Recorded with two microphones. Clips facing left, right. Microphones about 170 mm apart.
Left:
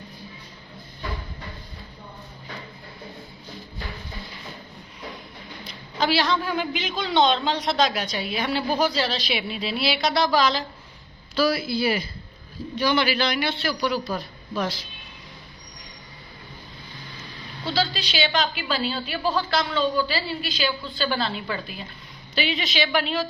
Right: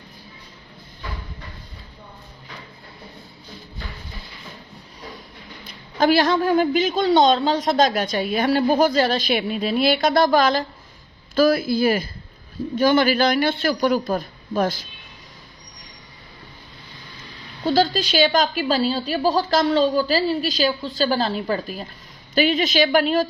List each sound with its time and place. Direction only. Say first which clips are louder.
5.6 s a woman's voice: right 6 dB; 50° right (ahead or behind)
17.7 s a woman's voice: right 7 dB; 45° right (ahead or behind)